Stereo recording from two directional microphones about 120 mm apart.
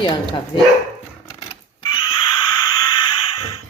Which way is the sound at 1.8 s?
40° left (ahead or behind).